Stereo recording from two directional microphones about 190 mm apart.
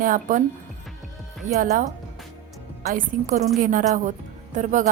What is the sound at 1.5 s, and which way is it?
Speech, 45° right (ahead or behind).